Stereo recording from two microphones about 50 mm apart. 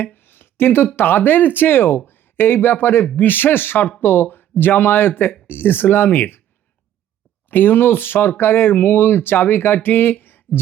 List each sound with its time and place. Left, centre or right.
0.0 s a sound: left
0.9 s speech: left
7.5 s speech: left